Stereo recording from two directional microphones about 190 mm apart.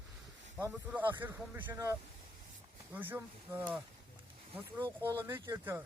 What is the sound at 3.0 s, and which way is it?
Speech, 10° right (ahead or behind).